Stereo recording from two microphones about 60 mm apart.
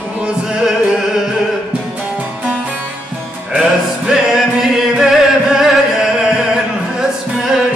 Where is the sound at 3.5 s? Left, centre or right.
Centre.